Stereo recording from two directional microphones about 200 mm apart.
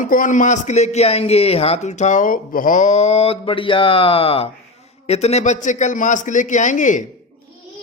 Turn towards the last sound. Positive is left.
turn(degrees=40)  # may be behind; listen again after turning